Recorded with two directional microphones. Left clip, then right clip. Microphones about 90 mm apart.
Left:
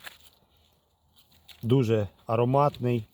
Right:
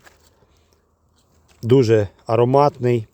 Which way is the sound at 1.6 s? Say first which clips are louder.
Right 11 dB; 30° right (ahead or behind).